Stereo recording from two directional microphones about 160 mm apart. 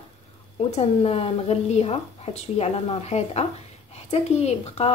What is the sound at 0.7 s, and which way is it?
A woman's voice, 40° left (ahead or behind).